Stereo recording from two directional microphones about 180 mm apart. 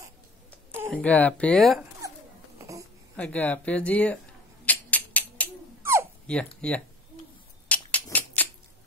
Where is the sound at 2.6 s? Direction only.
15° right (ahead or behind).